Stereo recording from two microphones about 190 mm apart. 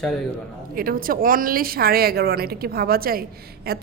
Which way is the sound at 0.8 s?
50° right (ahead or behind).